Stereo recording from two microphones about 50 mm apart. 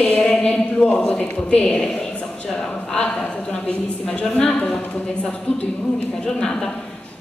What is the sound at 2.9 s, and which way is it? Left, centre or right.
A woman's voice, centre.